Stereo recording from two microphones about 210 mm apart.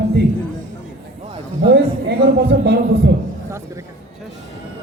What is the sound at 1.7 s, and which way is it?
A man's voice, 50° right (ahead or behind).